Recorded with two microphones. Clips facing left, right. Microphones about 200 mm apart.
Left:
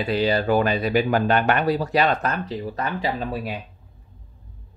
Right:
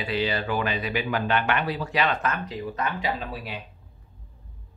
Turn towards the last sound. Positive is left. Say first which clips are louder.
# left 4 dB
turn(degrees=40)  # may be behind; listen again after turning